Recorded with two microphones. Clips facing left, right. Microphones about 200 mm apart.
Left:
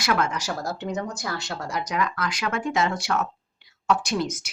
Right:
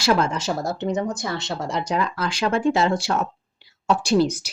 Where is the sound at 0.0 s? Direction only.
30° right (ahead or behind).